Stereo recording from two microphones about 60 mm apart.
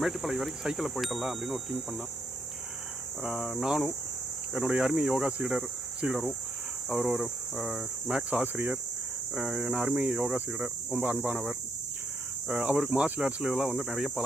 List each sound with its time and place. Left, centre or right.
0.0 s speech: centre
3.2 s speech: centre; by 8.8 s right
9.3 s speech: centre
11.0 s speech: right
12.5 s speech: right
13.5 s speech: centre